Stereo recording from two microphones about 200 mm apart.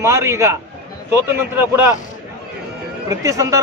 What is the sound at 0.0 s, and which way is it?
Speech, 15° right (ahead or behind).